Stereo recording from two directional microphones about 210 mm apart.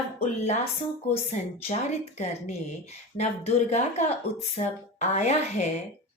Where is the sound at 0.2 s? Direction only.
30° left (ahead or behind).